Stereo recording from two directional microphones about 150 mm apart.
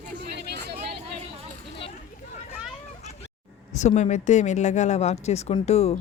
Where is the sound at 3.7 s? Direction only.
50° left (ahead or behind).